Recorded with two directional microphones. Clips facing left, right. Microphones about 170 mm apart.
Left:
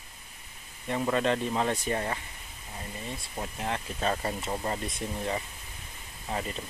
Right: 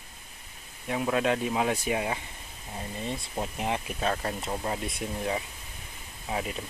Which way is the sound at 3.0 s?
20° right (ahead or behind).